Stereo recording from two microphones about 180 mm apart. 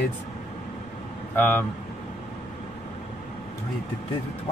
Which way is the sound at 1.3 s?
10° left (ahead or behind).